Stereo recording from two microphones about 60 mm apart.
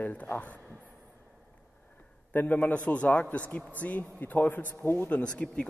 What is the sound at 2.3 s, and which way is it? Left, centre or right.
A man's voice, left.